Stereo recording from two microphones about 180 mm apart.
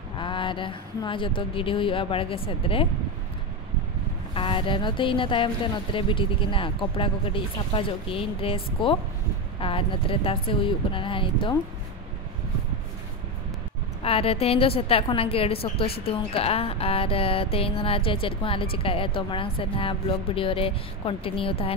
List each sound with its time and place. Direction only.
0.2 s speech: 25° left (ahead or behind)
4.3 s speech: 30° left (ahead or behind)
14.0 s speech: 30° left (ahead or behind)